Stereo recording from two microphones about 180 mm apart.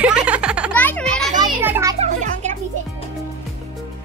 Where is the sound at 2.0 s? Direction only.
40° right (ahead or behind).